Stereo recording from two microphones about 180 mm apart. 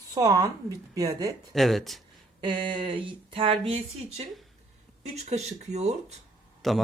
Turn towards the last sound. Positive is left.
turn(degrees=0)  # may be behind; listen again after turning